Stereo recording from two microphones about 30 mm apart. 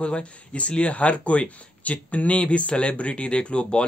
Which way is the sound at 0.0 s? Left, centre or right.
Left.